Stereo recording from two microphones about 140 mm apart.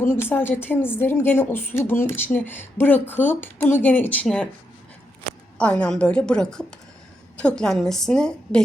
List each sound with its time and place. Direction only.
0.0 s a woman's voice: 15° left (ahead or behind)
5.5 s a woman's voice: 10° left (ahead or behind)